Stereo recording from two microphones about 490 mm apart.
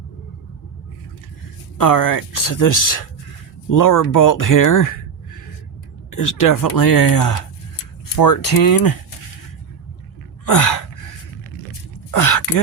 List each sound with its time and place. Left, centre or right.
1.8 s speech: left
10.4 s gasp: left
12.1 s a sound: left